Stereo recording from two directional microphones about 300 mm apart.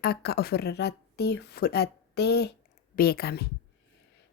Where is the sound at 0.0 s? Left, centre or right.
Left.